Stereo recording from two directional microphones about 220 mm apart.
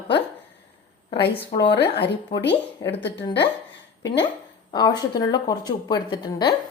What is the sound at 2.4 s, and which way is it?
Speech, 50° left (ahead or behind).